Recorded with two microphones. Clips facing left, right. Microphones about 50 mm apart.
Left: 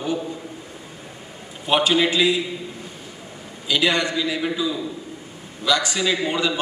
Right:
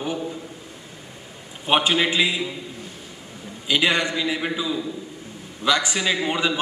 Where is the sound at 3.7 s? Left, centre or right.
Right.